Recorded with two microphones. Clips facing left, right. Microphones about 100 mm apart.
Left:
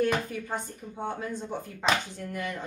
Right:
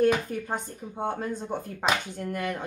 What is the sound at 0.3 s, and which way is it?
Speech, 45° right (ahead or behind).